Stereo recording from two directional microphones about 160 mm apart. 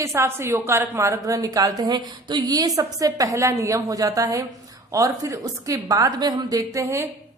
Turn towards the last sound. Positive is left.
turn(degrees=-15)  # may be behind; listen again after turning